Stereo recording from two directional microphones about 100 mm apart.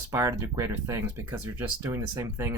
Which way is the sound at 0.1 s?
30° right (ahead or behind).